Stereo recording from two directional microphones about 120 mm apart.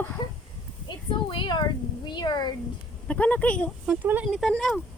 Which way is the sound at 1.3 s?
40° left (ahead or behind).